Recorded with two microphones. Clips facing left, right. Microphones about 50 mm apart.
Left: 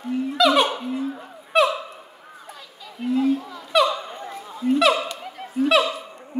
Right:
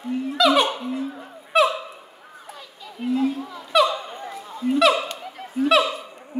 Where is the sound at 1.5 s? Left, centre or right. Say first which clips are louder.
Even; centre.